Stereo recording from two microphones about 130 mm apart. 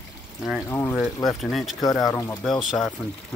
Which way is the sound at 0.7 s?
20° left (ahead or behind).